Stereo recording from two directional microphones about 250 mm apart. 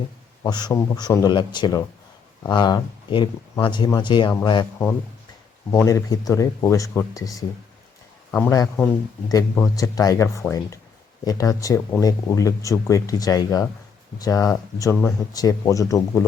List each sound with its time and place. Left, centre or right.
0.4 s speech: centre